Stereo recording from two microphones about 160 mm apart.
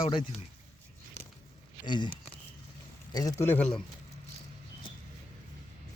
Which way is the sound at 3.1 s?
25° left (ahead or behind).